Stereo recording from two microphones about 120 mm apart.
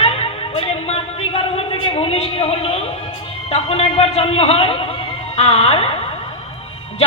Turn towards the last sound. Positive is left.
turn(degrees=55)  # may be behind; listen again after turning